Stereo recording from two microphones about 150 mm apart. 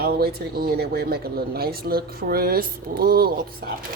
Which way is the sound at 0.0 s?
90° right.